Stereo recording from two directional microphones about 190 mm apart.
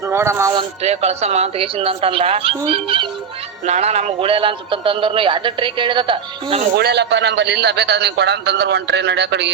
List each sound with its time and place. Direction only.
0.0 s speech: 15° right (ahead or behind)
0.5 s a man's voice: 35° right (ahead or behind)
6.7 s a man's voice: 60° right (ahead or behind)